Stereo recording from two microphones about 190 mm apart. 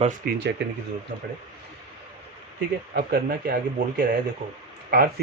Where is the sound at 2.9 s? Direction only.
55° right (ahead or behind).